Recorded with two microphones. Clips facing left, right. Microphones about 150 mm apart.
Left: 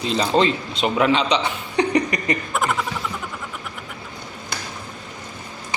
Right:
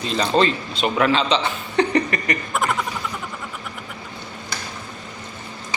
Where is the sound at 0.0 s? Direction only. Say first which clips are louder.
Even; 20° left (ahead or behind).